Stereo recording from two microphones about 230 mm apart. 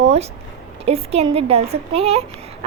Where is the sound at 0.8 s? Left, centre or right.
Right.